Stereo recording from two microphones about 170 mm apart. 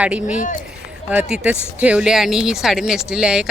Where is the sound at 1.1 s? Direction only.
10° right (ahead or behind).